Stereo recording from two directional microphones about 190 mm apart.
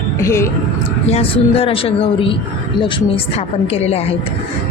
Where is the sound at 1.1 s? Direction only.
30° left (ahead or behind).